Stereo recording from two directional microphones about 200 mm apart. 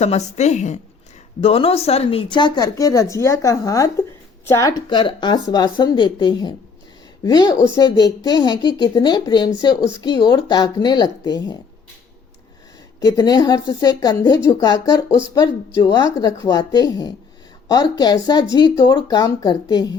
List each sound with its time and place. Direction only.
0.0 s a woman's voice: 35° left (ahead or behind); by 11.5 s 20° left (ahead or behind)
13.0 s speech: 20° left (ahead or behind)